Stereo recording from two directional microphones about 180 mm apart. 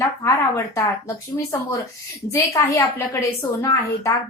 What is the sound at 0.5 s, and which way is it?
A woman's voice, 15° left (ahead or behind).